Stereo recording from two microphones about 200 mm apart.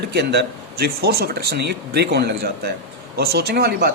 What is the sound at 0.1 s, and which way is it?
A man's voice, 55° right (ahead or behind).